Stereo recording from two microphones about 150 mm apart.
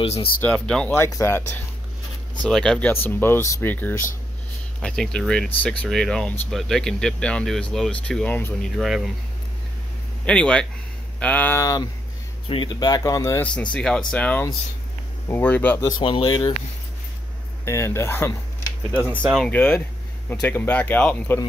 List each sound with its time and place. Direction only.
0.0 s speech: 40° left (ahead or behind)
0.4 s speech: 5° left (ahead or behind)
0.9 s speech: 20° left (ahead or behind)
2.4 s speech: 5° left (ahead or behind)
8.7 s speech: centre (ahead or behind)
10.2 s speech: 5° left (ahead or behind)
11.6 s speech: 25° left (ahead or behind)
13.5 s speech: 5° left (ahead or behind)
15.8 s speech: 35° left (ahead or behind)
17.6 s speech: 20° left (ahead or behind)
18.9 s speech: 10° right (ahead or behind)
19.4 s speech: 10° left (ahead or behind)